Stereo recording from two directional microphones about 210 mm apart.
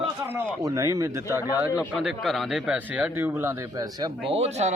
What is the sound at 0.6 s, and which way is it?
Speech, 15° right (ahead or behind).